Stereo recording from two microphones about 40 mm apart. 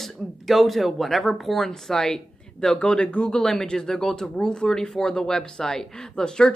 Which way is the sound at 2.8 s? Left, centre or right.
Left.